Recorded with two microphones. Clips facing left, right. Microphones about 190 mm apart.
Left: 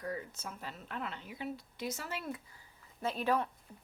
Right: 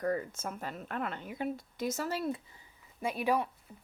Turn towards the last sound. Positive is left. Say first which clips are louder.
# right 2 dB
turn(degrees=-10)  # may be behind; listen again after turning